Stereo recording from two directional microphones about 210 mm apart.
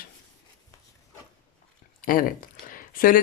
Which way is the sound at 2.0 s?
40° left (ahead or behind).